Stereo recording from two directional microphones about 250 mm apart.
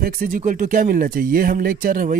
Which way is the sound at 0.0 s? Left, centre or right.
Right.